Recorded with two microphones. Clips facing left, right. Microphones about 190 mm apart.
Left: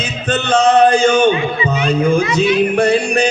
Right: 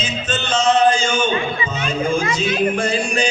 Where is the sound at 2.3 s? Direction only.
65° left (ahead or behind).